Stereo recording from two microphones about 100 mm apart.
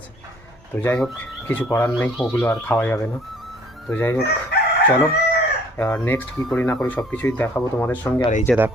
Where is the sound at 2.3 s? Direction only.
20° left (ahead or behind).